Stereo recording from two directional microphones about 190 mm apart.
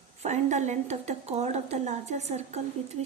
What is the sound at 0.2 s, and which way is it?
Speech, 35° right (ahead or behind).